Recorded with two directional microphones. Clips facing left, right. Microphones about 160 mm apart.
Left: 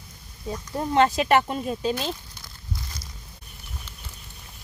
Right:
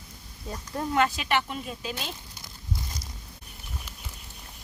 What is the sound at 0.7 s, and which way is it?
Speech, 25° left (ahead or behind).